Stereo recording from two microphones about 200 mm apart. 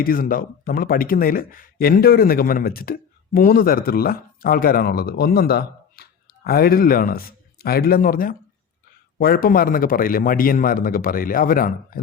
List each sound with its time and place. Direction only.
0.0 s speech: 45° left (ahead or behind)